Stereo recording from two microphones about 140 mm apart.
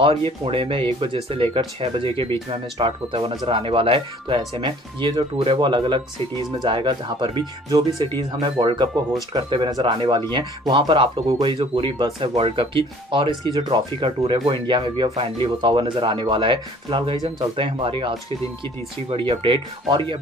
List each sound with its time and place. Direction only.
0.0 s speech: 40° right (ahead or behind)